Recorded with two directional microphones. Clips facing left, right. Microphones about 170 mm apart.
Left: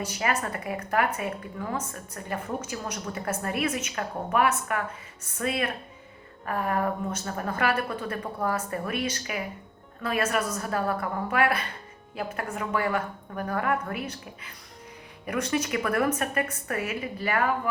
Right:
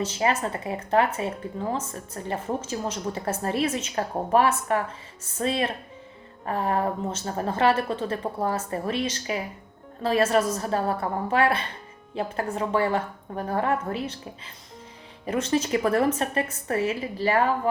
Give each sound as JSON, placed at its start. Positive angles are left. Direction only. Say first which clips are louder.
{"t": 0.0, "sound": "a woman's voice", "louder": "right 4 dB", "side_deg": -25}